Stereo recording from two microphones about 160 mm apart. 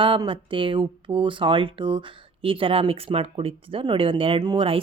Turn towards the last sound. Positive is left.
turn(degrees=-35)  # may be behind; listen again after turning